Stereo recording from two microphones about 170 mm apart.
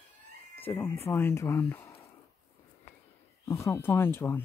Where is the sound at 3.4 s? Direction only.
15° left (ahead or behind).